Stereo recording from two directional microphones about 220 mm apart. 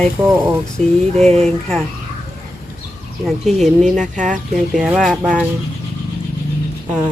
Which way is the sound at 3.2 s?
Centre (ahead or behind).